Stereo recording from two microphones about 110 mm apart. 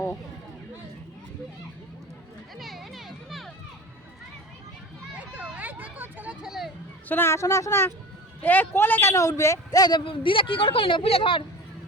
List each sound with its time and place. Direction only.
2.6 s music: centre (ahead or behind)
5.3 s vehicle: 15° right (ahead or behind)
6.4 s a sound: 5° right (ahead or behind)
7.1 s a man's voice: 20° left (ahead or behind)
10.1 s a woman's voice: 55° left (ahead or behind)